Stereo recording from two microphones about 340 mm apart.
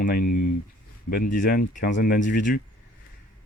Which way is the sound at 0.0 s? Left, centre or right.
Left.